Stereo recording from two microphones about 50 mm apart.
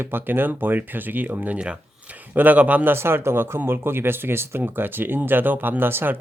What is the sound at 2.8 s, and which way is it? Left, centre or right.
Speech, right.